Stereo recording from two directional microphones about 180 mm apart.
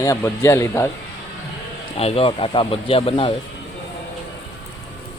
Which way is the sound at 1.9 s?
30° left (ahead or behind).